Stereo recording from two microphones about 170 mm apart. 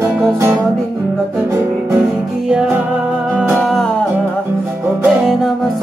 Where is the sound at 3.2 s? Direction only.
10° right (ahead or behind).